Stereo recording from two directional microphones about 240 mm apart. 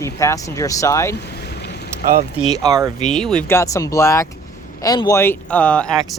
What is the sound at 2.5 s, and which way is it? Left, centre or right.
Speech, centre.